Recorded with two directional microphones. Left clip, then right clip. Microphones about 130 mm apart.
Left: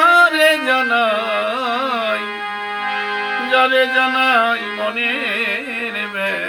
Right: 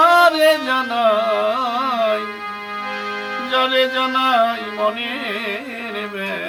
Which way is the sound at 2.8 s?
30° right (ahead or behind).